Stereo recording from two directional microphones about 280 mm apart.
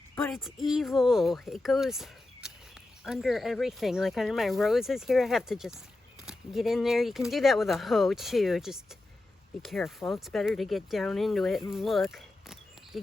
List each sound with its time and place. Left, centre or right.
0.3 s speech: centre